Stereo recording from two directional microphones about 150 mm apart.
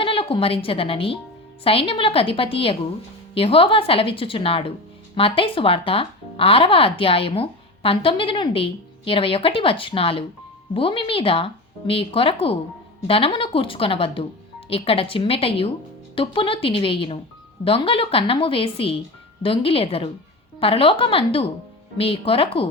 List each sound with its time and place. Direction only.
0.0 s speech: 40° left (ahead or behind)